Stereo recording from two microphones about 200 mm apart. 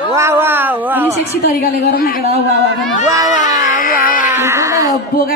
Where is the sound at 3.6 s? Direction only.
40° left (ahead or behind).